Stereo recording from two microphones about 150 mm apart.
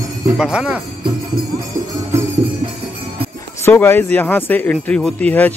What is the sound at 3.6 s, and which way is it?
Speech, 15° left (ahead or behind).